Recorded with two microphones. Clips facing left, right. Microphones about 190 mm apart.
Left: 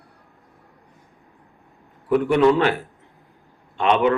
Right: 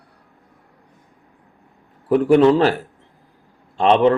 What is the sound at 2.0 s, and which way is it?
Speech, 35° right (ahead or behind).